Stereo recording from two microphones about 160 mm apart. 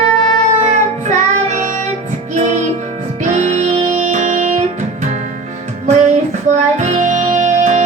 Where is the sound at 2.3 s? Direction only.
50° right (ahead or behind).